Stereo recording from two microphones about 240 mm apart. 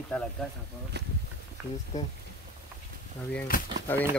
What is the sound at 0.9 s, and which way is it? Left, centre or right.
Speech, right.